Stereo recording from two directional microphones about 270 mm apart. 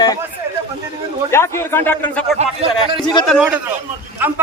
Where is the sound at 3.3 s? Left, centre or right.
Centre.